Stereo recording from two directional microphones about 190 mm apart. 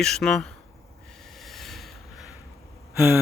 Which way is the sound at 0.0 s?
Centre (ahead or behind).